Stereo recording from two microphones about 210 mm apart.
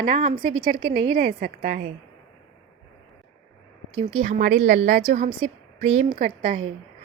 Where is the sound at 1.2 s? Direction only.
40° right (ahead or behind).